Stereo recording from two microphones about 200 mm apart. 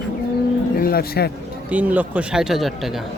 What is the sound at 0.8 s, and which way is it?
Speech, 50° left (ahead or behind).